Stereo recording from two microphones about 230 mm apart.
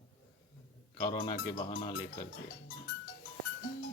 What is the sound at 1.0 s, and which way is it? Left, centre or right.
Speech, centre.